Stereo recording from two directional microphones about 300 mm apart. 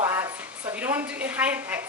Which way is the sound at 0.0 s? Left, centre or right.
Centre.